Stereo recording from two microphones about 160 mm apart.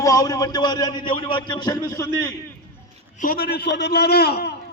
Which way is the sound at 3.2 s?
70° left (ahead or behind).